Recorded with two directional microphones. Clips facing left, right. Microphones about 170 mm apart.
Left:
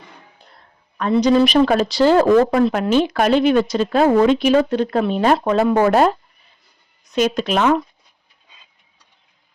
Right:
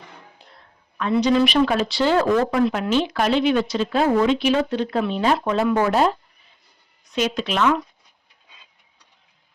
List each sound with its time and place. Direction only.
1.2 s speech: 40° left (ahead or behind)
2.9 s speech: 45° left (ahead or behind)
5.9 s speech: 55° left (ahead or behind)